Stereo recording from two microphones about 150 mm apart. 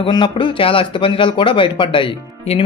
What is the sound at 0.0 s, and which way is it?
A man's voice, 30° left (ahead or behind).